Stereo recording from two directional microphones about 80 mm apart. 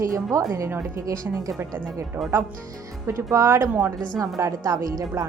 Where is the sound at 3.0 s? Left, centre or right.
Right.